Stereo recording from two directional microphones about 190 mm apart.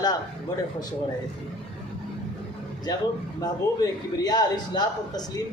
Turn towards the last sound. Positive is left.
turn(degrees=20)  # may be behind; listen again after turning